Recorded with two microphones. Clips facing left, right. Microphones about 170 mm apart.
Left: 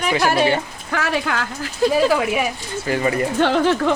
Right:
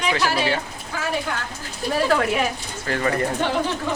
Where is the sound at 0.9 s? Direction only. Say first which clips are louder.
Left 4 dB; 75° left (ahead or behind).